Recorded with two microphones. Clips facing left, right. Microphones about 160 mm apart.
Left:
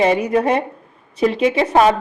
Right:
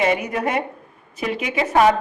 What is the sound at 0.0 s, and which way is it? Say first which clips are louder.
Speech: left 5 dB; 30° left (ahead or behind).